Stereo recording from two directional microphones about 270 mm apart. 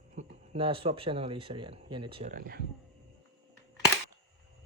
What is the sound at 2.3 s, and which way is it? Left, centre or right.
Speech, right.